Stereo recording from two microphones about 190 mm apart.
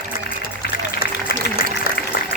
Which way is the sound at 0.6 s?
50° left (ahead or behind).